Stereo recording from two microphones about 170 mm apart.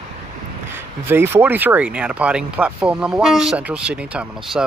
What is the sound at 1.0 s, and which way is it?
Speech, 10° right (ahead or behind).